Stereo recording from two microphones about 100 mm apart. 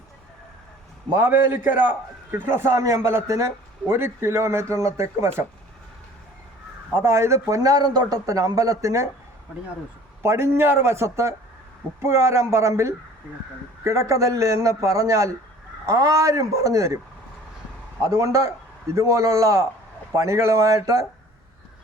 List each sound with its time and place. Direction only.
1.1 s a man's voice: 20° right (ahead or behind)
6.9 s a man's voice: 30° right (ahead or behind)
10.2 s a man's voice: 25° right (ahead or behind)
18.0 s a man's voice: 30° right (ahead or behind)